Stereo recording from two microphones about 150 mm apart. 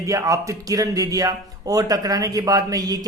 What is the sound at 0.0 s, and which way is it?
Speech, 20° right (ahead or behind).